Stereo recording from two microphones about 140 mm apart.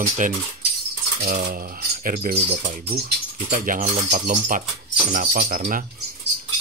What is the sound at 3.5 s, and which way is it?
Speech, 70° right (ahead or behind).